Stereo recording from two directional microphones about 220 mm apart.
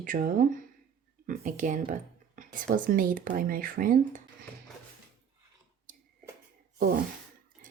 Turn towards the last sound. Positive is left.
turn(degrees=-45)  # may be behind; listen again after turning